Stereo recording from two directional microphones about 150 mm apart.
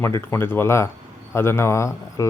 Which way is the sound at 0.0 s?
20° left (ahead or behind).